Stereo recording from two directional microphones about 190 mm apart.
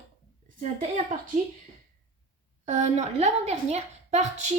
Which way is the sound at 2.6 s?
40° right (ahead or behind).